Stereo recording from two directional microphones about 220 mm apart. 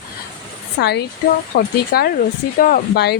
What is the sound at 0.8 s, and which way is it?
Speech, 50° left (ahead or behind).